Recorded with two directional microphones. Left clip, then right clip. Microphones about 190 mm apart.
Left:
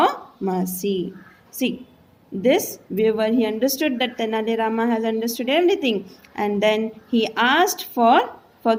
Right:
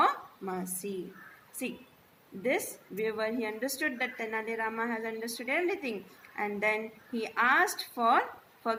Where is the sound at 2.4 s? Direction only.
60° left (ahead or behind).